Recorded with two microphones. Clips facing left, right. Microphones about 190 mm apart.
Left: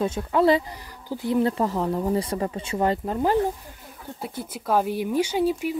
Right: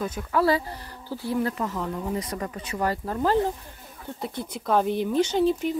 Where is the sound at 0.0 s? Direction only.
25° left (ahead or behind).